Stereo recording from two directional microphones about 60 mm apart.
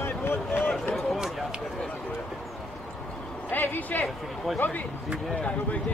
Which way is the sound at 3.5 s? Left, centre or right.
Left.